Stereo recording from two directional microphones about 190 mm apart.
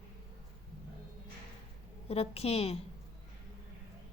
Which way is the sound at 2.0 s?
30° left (ahead or behind).